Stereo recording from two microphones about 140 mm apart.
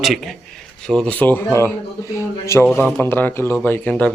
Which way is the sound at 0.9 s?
5° left (ahead or behind).